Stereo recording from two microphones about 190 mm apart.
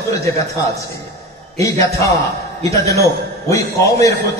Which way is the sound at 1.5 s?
15° left (ahead or behind).